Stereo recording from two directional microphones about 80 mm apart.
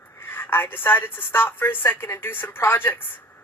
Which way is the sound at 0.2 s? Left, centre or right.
Left.